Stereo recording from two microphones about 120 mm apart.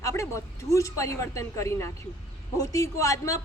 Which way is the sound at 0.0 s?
25° left (ahead or behind).